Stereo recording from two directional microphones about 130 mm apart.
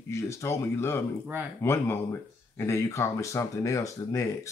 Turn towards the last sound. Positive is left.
turn(degrees=25)  # may be behind; listen again after turning